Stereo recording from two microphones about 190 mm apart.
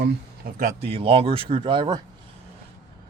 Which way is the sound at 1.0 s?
30° right (ahead or behind).